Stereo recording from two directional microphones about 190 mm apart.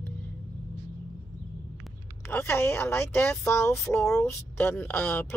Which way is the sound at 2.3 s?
10° left (ahead or behind).